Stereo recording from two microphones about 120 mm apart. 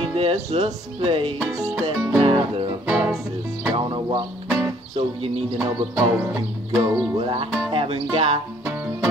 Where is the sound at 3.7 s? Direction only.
40° right (ahead or behind).